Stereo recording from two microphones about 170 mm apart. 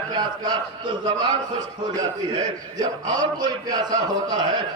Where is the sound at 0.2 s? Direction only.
25° right (ahead or behind).